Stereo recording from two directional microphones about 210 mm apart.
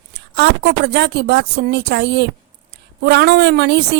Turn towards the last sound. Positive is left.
turn(degrees=-50)  # may be behind; listen again after turning